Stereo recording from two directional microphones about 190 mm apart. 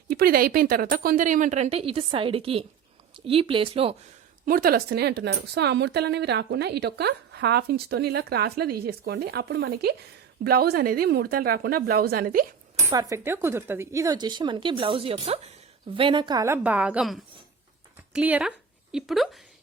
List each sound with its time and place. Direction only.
0.1 s speech: 50° right (ahead or behind); by 3.9 s 30° right (ahead or behind)
4.4 s speech: 50° right (ahead or behind)
12.8 s a woman's voice: 20° right (ahead or behind); by 19.4 s centre (ahead or behind)